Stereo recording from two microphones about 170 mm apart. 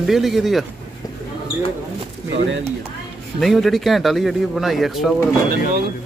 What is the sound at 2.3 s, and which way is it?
Speech, 90° right.